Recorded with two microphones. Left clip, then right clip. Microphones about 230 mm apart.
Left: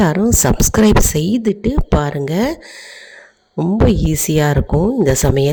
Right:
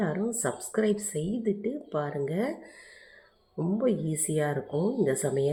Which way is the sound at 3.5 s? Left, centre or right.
Left.